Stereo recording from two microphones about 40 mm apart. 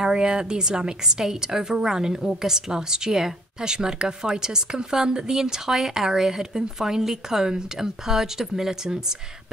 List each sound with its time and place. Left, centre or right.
0.0 s a woman's voice: centre